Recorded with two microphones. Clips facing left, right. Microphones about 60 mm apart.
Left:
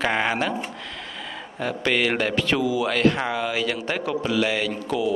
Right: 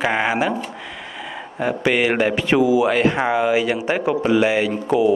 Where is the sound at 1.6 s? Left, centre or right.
Centre.